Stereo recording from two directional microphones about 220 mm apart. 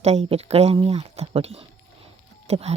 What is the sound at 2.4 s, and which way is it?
Music, 30° right (ahead or behind).